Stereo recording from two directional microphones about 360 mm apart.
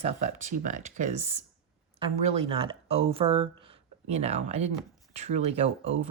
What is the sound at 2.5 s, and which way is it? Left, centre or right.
A woman's voice, centre.